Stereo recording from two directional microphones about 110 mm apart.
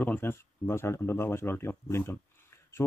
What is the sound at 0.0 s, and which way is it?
Speech, 20° left (ahead or behind).